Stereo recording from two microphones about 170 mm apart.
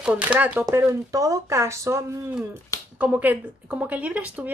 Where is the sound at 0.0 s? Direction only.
5° right (ahead or behind).